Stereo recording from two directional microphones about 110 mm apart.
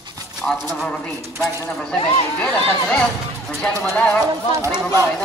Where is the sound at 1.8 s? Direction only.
10° left (ahead or behind).